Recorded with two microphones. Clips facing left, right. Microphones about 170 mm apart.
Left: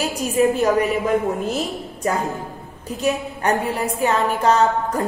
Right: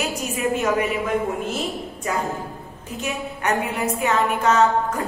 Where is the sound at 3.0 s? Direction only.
35° left (ahead or behind).